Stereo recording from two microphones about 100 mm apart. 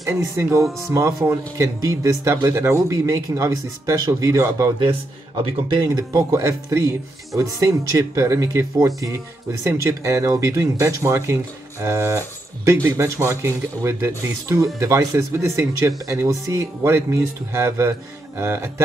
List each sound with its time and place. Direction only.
0.1 s speech: 25° right (ahead or behind)
5.7 s speech: 40° right (ahead or behind); by 18.7 s 25° right (ahead or behind)